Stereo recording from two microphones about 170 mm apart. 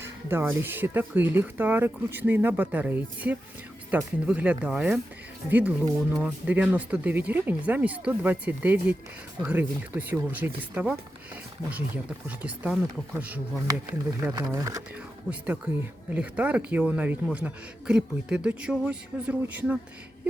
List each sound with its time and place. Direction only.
0.0 s speech: 15° right (ahead or behind)
12.4 s speech: 10° right (ahead or behind)
13.7 s speech: 20° right (ahead or behind)